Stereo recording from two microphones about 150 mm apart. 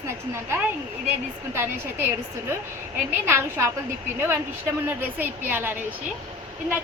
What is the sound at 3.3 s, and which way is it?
Speech, 15° right (ahead or behind).